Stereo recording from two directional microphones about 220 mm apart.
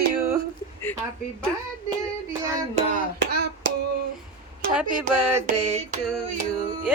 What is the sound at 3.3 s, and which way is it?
Hands, 50° right (ahead or behind).